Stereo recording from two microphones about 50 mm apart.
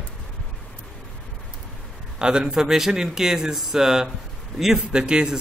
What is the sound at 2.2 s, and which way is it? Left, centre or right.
A man's voice, centre.